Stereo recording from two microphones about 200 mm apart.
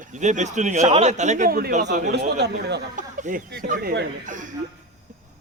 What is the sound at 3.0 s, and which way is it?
A man's voice, 40° right (ahead or behind).